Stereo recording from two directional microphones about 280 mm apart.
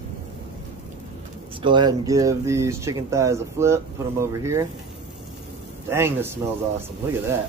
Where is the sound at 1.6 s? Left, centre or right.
Centre.